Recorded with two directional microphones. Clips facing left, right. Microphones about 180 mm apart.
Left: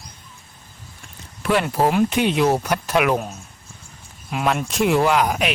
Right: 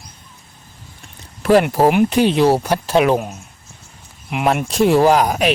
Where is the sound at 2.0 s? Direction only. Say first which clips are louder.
Right 5 dB; 35° right (ahead or behind).